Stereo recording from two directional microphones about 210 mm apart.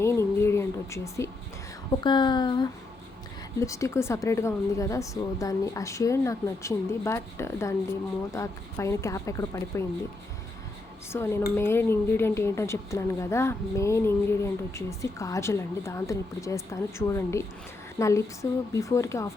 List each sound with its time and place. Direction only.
0.0 s a sound: 10° left (ahead or behind)
2.0 s speech: 20° left (ahead or behind)
11.1 s speech: 10° left (ahead or behind)
18.7 s speech: 15° left (ahead or behind)